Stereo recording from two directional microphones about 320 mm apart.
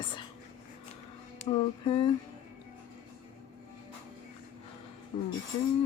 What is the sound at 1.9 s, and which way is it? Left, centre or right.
Speech, centre.